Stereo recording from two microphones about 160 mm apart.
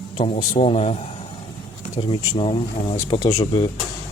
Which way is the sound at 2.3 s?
35° left (ahead or behind).